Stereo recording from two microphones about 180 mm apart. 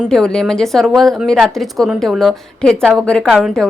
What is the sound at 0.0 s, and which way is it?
A woman's voice, 5° left (ahead or behind).